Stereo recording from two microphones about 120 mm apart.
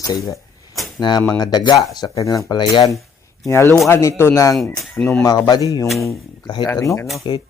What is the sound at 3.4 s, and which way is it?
Speech, 25° left (ahead or behind).